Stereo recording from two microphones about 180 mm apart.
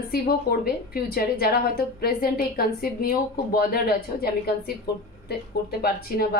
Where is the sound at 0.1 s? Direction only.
55° left (ahead or behind).